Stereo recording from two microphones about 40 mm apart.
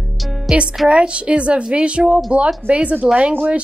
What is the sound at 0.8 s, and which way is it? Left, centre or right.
A woman's voice, right.